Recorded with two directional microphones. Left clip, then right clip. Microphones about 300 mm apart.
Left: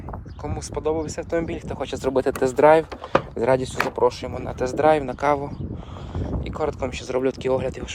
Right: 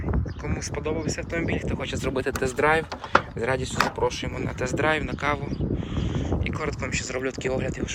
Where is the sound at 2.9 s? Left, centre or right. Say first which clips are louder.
Even; left.